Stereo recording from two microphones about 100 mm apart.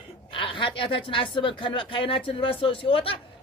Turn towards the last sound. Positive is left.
turn(degrees=60)  # may be behind; listen again after turning